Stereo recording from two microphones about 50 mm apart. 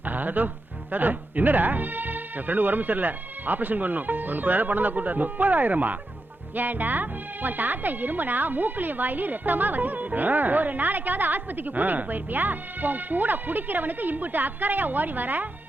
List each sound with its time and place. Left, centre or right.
0.0 s speech: right